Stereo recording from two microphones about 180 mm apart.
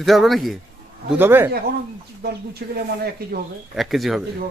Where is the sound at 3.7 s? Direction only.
Centre (ahead or behind).